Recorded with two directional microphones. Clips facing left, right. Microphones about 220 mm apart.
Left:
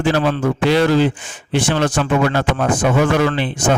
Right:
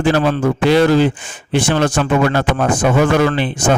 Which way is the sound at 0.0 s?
50° right (ahead or behind).